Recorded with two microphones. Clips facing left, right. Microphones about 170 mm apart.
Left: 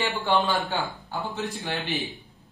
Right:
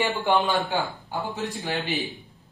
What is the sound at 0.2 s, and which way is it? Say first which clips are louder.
Speech: even; 20° right (ahead or behind).